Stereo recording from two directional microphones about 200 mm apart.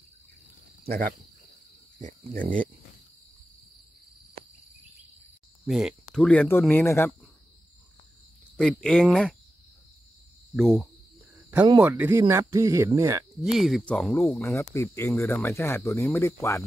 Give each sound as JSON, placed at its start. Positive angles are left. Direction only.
{"t": 0.8, "sound": "speech", "side_deg": -45}
{"t": 5.7, "sound": "speech", "side_deg": 0}
{"t": 8.5, "sound": "speech", "side_deg": 5}
{"t": 10.5, "sound": "speech", "side_deg": 0}
{"t": 11.8, "sound": "speech", "side_deg": -10}
{"t": 13.4, "sound": "speech", "side_deg": 0}